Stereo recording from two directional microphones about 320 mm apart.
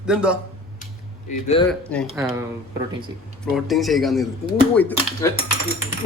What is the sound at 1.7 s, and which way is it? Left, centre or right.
Speech, centre.